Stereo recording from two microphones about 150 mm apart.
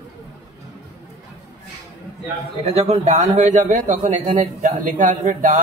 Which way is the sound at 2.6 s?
45° right (ahead or behind).